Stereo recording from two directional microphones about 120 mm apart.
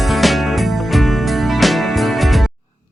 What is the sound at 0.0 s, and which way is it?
Music, centre (ahead or behind).